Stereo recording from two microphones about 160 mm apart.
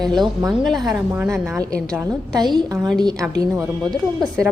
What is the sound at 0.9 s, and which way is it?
Speech, 10° right (ahead or behind).